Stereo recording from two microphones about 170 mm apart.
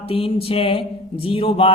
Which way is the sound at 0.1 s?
35° left (ahead or behind).